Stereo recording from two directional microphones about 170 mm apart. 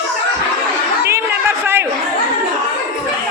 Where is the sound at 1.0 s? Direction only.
15° right (ahead or behind).